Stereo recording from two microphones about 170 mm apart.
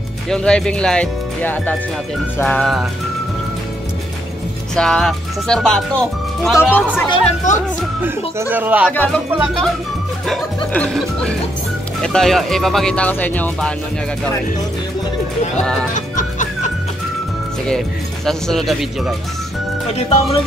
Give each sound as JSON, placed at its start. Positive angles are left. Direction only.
{"t": 0.3, "sound": "speech", "side_deg": 5}
{"t": 2.3, "sound": "music", "side_deg": 10}
{"t": 2.6, "sound": "speech", "side_deg": 0}
{"t": 4.7, "sound": "speech", "side_deg": 5}
{"t": 7.5, "sound": "speech", "side_deg": 50}
{"t": 8.0, "sound": "speech", "side_deg": -10}
{"t": 8.9, "sound": "speech", "side_deg": 5}
{"t": 10.7, "sound": "speech", "side_deg": 5}
{"t": 15.9, "sound": "music", "side_deg": 45}
{"t": 17.6, "sound": "speech", "side_deg": 0}
{"t": 19.9, "sound": "speech", "side_deg": 35}